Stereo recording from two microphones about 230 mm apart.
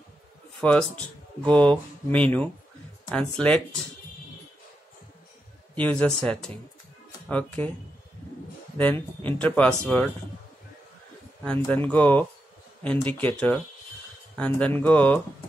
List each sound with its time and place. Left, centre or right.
0.6 s speech: centre
5.8 s speech: centre
8.7 s speech: centre
11.4 s speech: centre